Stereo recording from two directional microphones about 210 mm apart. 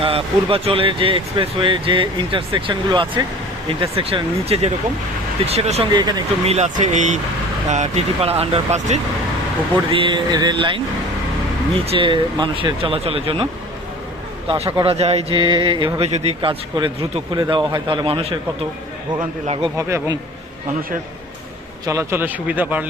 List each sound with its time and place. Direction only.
0.0 s speech: 25° right (ahead or behind)
19.7 s a man's voice: 15° right (ahead or behind)
21.8 s a man's voice: 10° right (ahead or behind)